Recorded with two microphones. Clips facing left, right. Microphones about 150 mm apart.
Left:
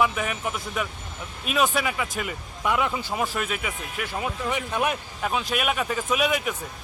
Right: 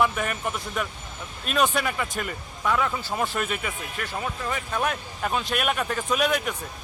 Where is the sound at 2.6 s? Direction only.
15° left (ahead or behind).